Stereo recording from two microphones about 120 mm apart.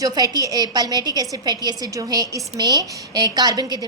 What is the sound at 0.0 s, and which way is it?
A woman's voice, 30° right (ahead or behind).